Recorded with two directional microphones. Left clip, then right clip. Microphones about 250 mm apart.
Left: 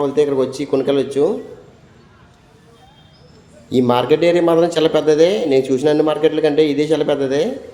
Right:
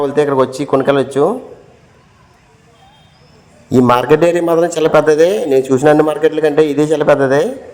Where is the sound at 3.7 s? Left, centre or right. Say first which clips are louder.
Right 4 dB; right.